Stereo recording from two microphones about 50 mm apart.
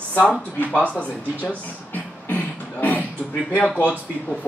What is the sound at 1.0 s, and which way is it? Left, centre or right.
Beatboxing, left.